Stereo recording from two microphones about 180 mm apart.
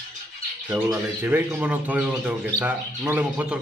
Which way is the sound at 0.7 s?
10° right (ahead or behind).